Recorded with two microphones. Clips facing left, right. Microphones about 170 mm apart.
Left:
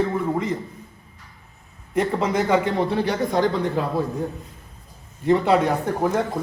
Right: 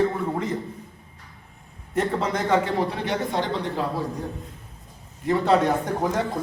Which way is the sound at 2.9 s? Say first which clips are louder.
Left 5 dB; 35° left (ahead or behind).